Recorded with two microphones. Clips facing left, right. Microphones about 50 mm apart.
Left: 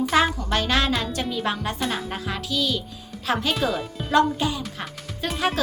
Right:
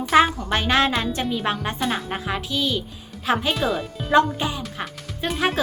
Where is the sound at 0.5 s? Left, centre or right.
Right.